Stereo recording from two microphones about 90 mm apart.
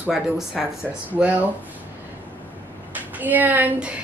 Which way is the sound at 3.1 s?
20° right (ahead or behind).